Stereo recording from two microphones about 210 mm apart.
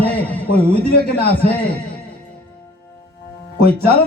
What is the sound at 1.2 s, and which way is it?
Speech, 45° left (ahead or behind).